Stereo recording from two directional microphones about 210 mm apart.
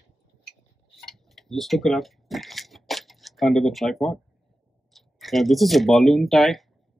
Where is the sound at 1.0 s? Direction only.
Centre (ahead or behind).